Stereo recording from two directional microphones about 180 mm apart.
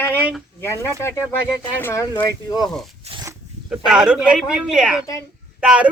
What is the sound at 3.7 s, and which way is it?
Speech, 5° right (ahead or behind).